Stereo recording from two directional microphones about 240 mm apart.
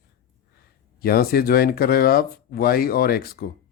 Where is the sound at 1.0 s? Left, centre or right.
Left.